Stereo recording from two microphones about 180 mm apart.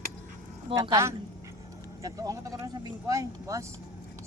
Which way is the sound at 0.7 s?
20° right (ahead or behind).